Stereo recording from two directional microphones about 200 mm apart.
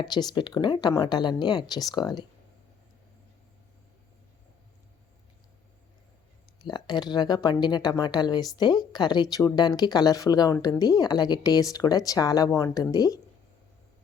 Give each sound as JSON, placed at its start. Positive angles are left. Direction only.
{"t": 0.0, "sound": "speech", "side_deg": 20}
{"t": 6.7, "sound": "speech", "side_deg": 20}